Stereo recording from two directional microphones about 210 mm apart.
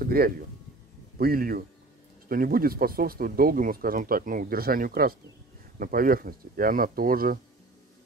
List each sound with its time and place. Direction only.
0.0 s speech: 45° right (ahead or behind)